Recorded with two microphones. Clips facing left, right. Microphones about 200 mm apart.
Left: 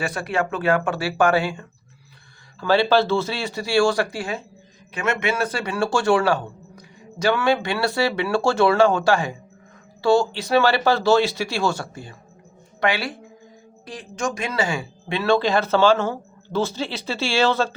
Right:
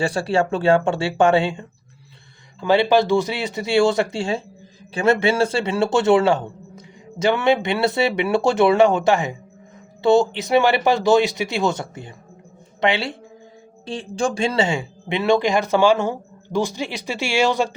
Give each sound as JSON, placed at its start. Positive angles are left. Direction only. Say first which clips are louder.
{"t": 0.0, "sound": "speech", "louder": "right 4 dB", "side_deg": -30}